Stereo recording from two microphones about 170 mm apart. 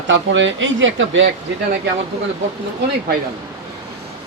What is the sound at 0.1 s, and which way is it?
Speech, 90° right.